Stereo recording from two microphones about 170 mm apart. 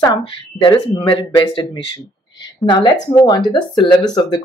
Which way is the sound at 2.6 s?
25° left (ahead or behind).